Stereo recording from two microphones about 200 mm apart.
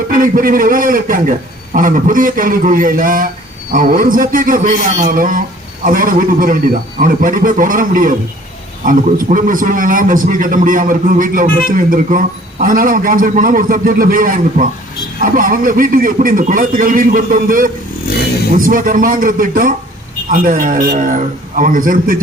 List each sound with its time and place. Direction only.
0.1 s a man's voice: 45° right (ahead or behind)